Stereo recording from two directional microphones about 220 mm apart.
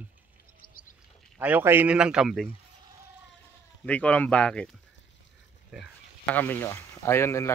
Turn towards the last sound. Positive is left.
turn(degrees=10)  # may be behind; listen again after turning